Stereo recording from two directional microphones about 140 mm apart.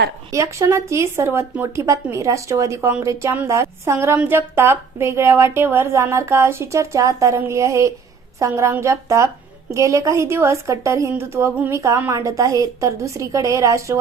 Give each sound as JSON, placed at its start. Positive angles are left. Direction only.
{"t": 0.3, "sound": "a woman's voice", "side_deg": -20}